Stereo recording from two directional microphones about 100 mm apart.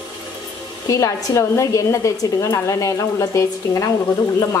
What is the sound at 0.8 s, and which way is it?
A woman's voice, 35° left (ahead or behind).